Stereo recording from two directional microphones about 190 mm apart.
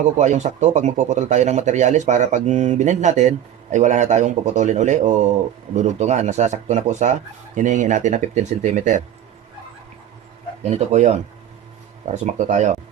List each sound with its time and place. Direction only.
0.0 s speech: 35° right (ahead or behind)
10.6 s speech: 35° right (ahead or behind)